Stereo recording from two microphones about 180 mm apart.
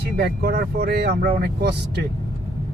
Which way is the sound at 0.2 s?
60° right (ahead or behind).